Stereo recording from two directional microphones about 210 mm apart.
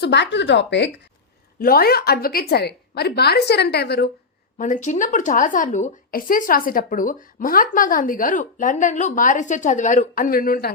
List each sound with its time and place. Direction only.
0.0 s speech: 55° left (ahead or behind)
1.5 s a woman's voice: 45° left (ahead or behind)
4.5 s a woman's voice: 35° left (ahead or behind)